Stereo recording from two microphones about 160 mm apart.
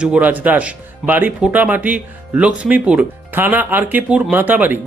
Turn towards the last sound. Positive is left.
turn(degrees=-10)  # may be behind; listen again after turning